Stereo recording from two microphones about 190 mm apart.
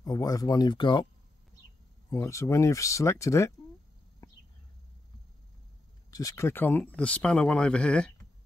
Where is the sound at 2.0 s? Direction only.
15° left (ahead or behind).